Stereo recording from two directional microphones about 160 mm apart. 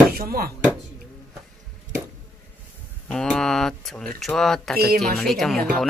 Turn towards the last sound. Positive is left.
turn(degrees=5)  # may be behind; listen again after turning